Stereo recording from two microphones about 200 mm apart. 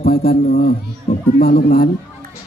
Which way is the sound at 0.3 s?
50° left (ahead or behind).